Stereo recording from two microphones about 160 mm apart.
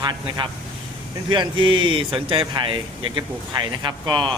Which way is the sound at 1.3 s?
30° right (ahead or behind).